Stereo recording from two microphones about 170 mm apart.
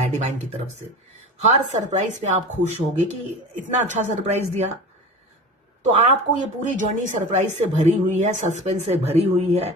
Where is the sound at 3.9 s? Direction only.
40° right (ahead or behind).